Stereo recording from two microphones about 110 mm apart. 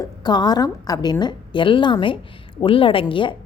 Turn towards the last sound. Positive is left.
turn(degrees=50)  # may be behind; listen again after turning